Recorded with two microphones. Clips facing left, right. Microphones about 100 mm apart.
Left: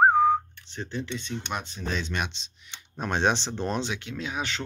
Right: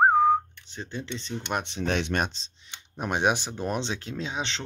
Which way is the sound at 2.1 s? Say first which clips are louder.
Right 4 dB; 40° right (ahead or behind).